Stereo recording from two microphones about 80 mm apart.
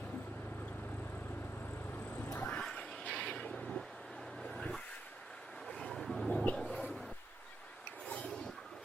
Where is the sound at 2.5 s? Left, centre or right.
Centre.